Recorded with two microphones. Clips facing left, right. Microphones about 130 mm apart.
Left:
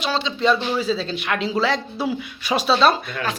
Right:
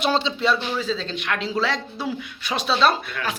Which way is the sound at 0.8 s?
10° left (ahead or behind).